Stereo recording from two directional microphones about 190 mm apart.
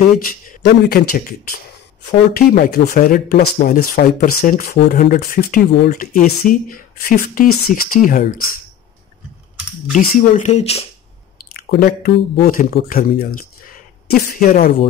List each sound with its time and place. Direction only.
0.8 s speech: 50° left (ahead or behind)
9.9 s speech: 40° left (ahead or behind)
11.3 s speech: 50° left (ahead or behind)